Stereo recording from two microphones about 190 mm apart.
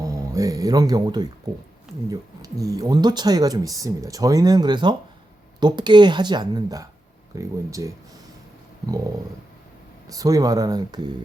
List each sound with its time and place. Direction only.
0.0 s speech: 20° right (ahead or behind)
10.1 s speech: 20° right (ahead or behind)